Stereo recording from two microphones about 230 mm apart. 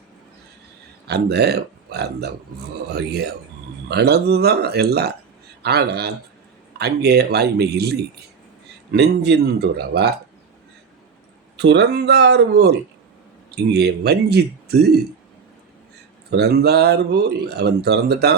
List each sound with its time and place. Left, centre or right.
1.0 s speech: right
11.5 s speech: right
16.3 s speech: right